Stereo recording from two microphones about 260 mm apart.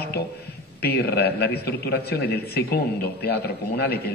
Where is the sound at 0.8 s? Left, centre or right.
Left.